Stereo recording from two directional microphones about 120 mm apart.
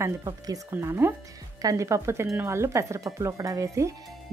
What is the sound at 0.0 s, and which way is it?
Speech, 25° right (ahead or behind).